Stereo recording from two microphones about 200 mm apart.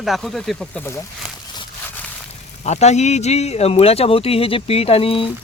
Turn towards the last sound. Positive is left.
turn(degrees=25)  # may be behind; listen again after turning